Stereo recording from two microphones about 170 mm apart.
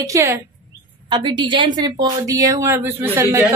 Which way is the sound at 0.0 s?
15° right (ahead or behind).